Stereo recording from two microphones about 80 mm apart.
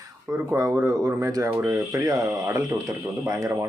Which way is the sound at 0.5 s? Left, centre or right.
Right.